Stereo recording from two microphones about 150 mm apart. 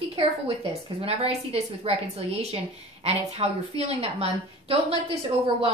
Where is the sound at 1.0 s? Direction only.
45° right (ahead or behind).